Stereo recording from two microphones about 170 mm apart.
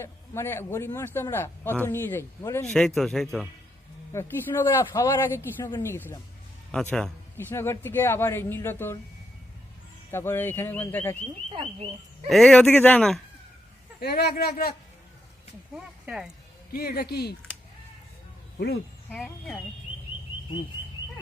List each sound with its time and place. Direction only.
0.0 s a man's voice: 15° left (ahead or behind)
2.6 s speech: 5° left (ahead or behind)
4.1 s a man's voice: 15° left (ahead or behind)
10.1 s a man's voice: 15° left (ahead or behind)
11.5 s speech: 35° right (ahead or behind)
12.3 s speech: 5° left (ahead or behind)
14.0 s a man's voice: 70° left (ahead or behind)
15.7 s speech: 5° right (ahead or behind)
16.7 s a man's voice: 65° left (ahead or behind)
19.1 s speech: 5° left (ahead or behind)